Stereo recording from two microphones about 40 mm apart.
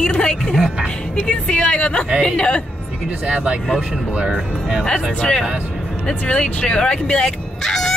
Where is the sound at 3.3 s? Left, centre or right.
Right.